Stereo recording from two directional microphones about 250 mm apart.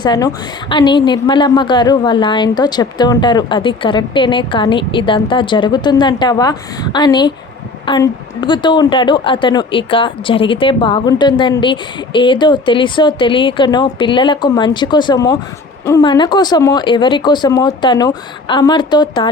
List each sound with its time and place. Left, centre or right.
0.0 s a woman's voice: centre